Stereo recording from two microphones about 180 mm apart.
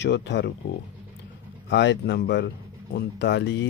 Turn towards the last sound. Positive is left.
turn(degrees=75)  # may be behind; listen again after turning